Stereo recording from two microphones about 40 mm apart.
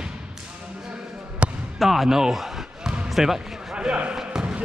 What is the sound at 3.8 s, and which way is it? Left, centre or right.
Basketball bounce, right.